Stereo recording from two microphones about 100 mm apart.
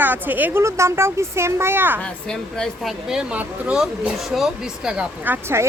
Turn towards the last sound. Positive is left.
turn(degrees=-25)  # may be behind; listen again after turning